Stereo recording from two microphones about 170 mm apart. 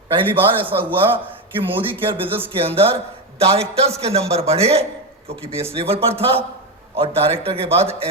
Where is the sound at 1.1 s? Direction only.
30° right (ahead or behind).